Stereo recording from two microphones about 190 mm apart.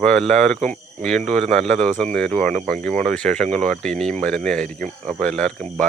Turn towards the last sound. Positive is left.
turn(degrees=5)  # may be behind; listen again after turning